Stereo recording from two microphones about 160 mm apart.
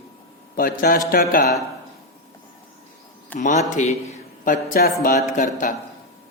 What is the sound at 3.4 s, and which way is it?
A man's voice, 50° left (ahead or behind).